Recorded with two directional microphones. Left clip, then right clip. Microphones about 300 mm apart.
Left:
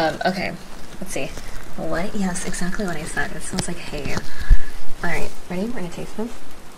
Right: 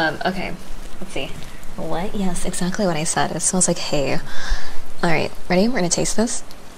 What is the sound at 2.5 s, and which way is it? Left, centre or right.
Speech, right.